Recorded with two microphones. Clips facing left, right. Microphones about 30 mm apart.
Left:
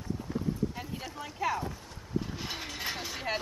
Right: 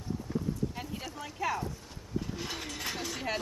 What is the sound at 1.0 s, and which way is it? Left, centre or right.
Speech, centre.